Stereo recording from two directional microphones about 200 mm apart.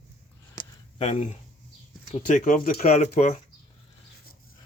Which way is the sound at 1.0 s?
30° left (ahead or behind).